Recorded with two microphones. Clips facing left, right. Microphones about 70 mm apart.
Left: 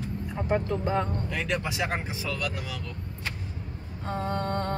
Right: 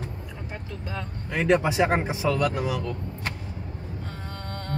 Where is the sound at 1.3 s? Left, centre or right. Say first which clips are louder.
Right 8 dB; right.